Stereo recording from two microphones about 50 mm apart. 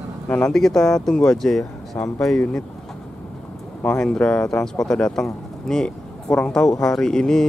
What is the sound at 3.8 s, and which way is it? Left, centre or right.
Speech, centre.